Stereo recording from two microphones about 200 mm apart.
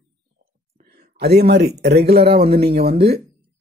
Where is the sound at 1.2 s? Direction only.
50° right (ahead or behind).